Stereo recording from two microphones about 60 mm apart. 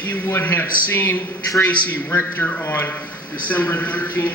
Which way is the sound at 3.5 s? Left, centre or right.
Left.